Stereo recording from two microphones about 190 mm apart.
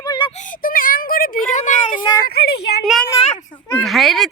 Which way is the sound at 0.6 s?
50° left (ahead or behind).